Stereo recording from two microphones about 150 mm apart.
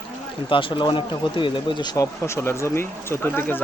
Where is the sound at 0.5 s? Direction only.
35° left (ahead or behind).